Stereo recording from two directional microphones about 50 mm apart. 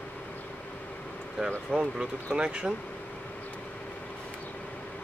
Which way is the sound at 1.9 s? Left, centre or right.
Centre.